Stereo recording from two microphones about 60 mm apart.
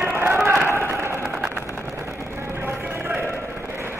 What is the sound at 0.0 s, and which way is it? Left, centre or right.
Run, right.